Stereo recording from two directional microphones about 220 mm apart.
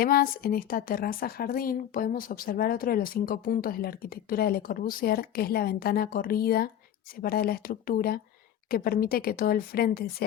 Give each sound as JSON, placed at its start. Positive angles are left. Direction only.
{"t": 0.0, "sound": "speech", "side_deg": 40}